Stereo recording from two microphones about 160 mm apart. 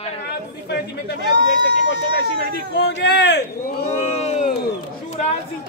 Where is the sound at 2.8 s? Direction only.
90° left.